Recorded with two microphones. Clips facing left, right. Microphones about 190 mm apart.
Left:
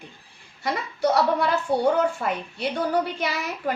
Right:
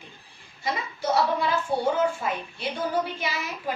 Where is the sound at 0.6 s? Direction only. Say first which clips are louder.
Left 5 dB; 65° left (ahead or behind).